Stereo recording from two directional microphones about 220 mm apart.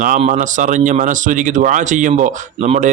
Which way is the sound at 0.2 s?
35° right (ahead or behind).